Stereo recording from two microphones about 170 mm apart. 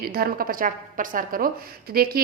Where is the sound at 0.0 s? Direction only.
60° right (ahead or behind).